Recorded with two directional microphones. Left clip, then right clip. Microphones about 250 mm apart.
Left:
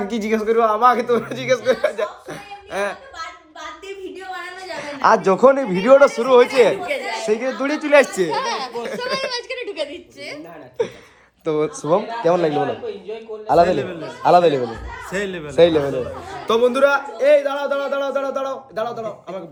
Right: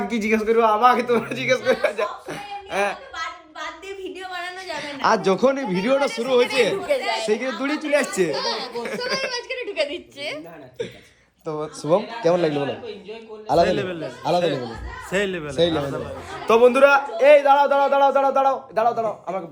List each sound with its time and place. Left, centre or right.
0.0 s a man's voice: centre
4.3 s a man's voice: centre
8.4 s a sound: centre
10.2 s a man's voice: centre
11.4 s speech: left
11.8 s a man's voice: centre